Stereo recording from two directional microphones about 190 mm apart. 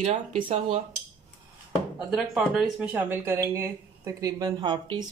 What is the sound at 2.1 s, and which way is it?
Speech, 5° right (ahead or behind).